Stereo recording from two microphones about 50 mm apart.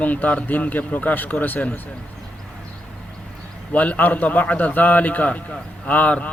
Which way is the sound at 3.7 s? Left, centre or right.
Left.